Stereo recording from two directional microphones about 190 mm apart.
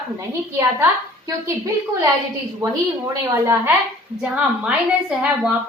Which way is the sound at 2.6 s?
20° right (ahead or behind).